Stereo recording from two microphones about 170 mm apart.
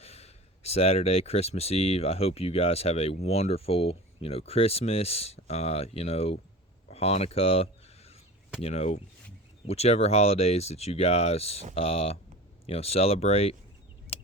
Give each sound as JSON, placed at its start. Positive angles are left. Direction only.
{"t": 0.0, "sound": "speech", "side_deg": 35}
{"t": 6.9, "sound": "a sound", "side_deg": 35}
{"t": 8.6, "sound": "speech", "side_deg": 40}